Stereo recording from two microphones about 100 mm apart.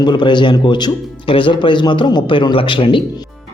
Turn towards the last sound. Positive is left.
turn(degrees=55)  # may be behind; listen again after turning